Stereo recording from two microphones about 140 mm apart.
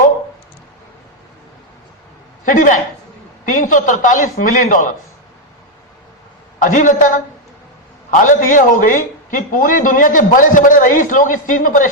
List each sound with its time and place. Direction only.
2.4 s a woman's voice: 65° left (ahead or behind)
6.6 s a man's voice: 70° left (ahead or behind)